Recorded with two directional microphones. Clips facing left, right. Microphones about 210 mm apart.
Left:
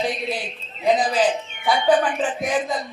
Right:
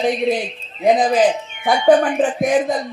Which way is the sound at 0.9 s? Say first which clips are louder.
Right 5 dB; 45° right (ahead or behind).